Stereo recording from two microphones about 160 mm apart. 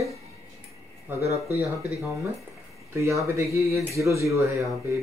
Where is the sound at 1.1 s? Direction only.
15° right (ahead or behind).